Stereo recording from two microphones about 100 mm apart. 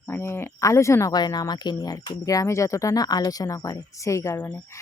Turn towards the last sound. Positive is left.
turn(degrees=30)  # may be behind; listen again after turning